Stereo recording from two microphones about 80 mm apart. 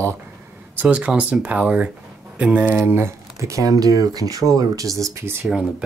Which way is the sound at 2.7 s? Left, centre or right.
Right.